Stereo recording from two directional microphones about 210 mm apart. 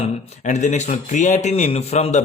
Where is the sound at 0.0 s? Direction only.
35° left (ahead or behind).